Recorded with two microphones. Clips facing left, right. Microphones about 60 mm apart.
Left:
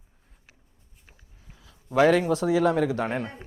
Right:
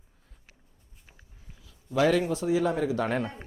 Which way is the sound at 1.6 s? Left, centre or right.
Left.